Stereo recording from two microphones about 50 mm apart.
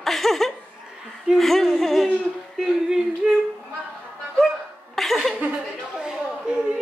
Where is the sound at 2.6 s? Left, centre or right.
Centre.